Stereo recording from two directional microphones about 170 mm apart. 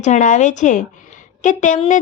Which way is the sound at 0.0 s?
45° left (ahead or behind).